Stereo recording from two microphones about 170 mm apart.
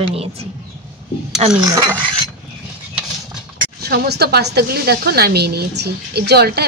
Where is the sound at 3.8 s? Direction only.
65° right (ahead or behind).